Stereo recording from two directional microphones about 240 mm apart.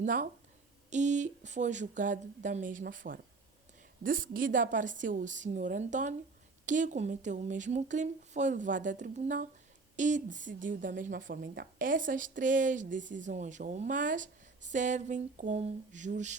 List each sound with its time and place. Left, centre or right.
0.0 s speech: right